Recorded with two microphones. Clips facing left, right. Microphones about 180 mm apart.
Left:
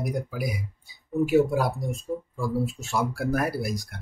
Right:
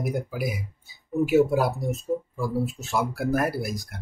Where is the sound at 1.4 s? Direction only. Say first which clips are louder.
Right 2 dB; 5° right (ahead or behind).